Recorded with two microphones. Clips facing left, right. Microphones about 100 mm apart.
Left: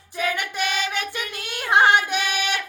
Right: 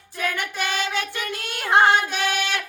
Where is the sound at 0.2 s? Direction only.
15° left (ahead or behind).